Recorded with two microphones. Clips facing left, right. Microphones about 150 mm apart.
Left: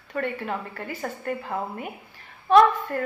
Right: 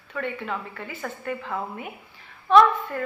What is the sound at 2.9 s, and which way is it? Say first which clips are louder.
Speech: left 2 dB; 45° left (ahead or behind).